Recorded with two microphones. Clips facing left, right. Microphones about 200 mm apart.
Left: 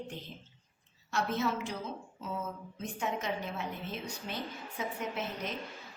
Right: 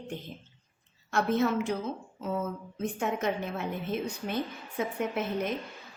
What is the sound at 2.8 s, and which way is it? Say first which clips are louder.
Speech: right 6 dB; 55° right (ahead or behind).